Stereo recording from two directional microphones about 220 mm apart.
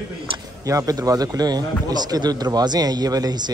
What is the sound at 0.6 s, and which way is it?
A man's voice, 15° right (ahead or behind).